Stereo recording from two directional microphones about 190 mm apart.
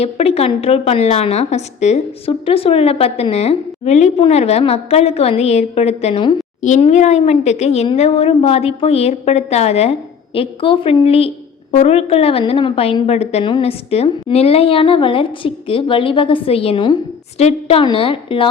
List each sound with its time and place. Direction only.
0.0 s a woman's voice: 30° left (ahead or behind)